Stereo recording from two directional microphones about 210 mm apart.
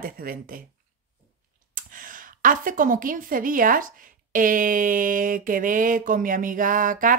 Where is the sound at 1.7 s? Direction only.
40° right (ahead or behind).